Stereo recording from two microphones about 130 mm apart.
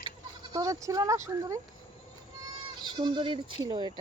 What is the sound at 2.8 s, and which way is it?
Speech, 35° right (ahead or behind).